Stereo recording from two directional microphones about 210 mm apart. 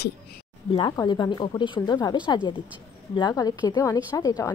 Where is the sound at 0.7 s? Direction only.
25° left (ahead or behind).